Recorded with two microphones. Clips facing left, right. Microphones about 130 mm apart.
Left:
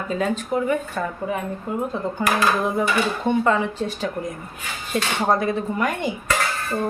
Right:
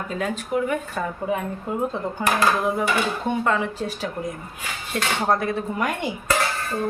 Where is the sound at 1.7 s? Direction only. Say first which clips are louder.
Left 1 dB; 20° right (ahead or behind).